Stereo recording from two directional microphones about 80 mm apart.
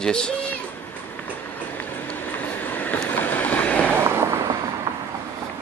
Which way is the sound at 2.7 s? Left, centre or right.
Centre.